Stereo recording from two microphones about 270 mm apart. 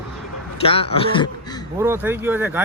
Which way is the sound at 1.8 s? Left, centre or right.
Centre.